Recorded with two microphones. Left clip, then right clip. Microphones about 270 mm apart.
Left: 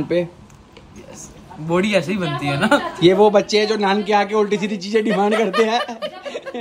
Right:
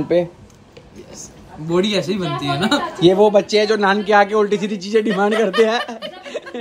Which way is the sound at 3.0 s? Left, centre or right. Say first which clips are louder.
Even; centre.